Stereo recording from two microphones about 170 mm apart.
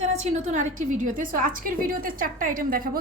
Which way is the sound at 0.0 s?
40° right (ahead or behind).